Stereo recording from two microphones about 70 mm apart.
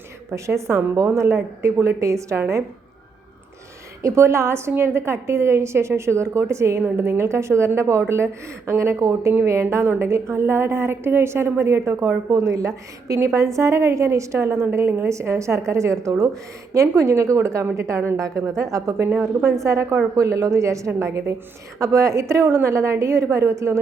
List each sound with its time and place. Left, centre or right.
0.3 s a woman's voice: right
4.0 s a woman's voice: right